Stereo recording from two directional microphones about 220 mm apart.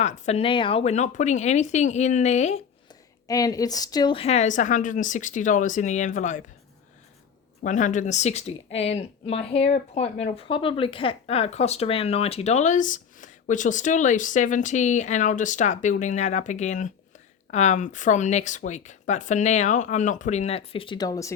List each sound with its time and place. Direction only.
0.0 s speech: 30° left (ahead or behind)
3.2 s speech: 15° left (ahead or behind); by 6.4 s 35° left (ahead or behind)
7.6 s speech: 35° left (ahead or behind); by 21.3 s 15° left (ahead or behind)